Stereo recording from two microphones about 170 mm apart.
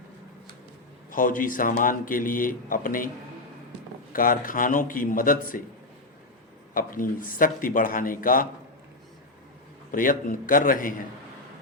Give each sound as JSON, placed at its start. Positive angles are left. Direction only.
{"t": 1.1, "sound": "speech", "side_deg": 50}
{"t": 4.1, "sound": "speech", "side_deg": 55}
{"t": 6.7, "sound": "speech", "side_deg": 55}
{"t": 9.9, "sound": "speech", "side_deg": 55}